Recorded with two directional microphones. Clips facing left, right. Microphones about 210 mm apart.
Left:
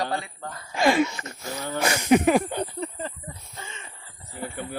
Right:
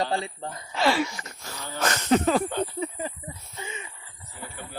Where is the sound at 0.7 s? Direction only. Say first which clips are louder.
Left 3 dB; 15° left (ahead or behind).